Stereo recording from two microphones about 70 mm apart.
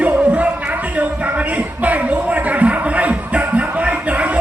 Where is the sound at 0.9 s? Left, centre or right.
Right.